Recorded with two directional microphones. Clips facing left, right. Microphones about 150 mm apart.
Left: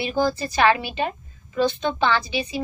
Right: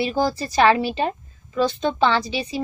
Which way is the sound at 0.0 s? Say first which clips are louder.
Right 1 dB; 35° right (ahead or behind).